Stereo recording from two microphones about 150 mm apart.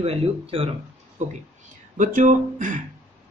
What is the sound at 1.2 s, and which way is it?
Speech, 50° right (ahead or behind).